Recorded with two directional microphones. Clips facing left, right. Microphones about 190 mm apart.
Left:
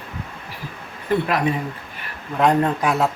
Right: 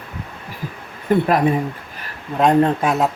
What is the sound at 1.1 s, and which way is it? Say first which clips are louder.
Speech: right 4 dB; 50° right (ahead or behind).